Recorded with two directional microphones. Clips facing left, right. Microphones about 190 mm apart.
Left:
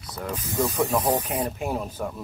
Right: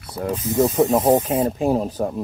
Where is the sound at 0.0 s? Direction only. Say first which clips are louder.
Right 7 dB; 30° right (ahead or behind).